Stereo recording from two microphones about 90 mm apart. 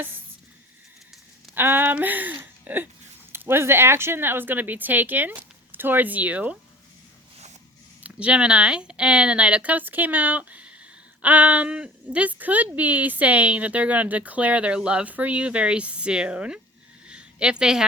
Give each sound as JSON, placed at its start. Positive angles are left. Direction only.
{"t": 1.5, "sound": "speech", "side_deg": -25}
{"t": 8.0, "sound": "a woman's voice", "side_deg": -15}
{"t": 17.1, "sound": "a sound", "side_deg": -10}